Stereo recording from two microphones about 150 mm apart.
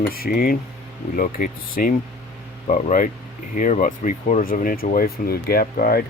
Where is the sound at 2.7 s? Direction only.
60° left (ahead or behind); by 6.0 s 85° left.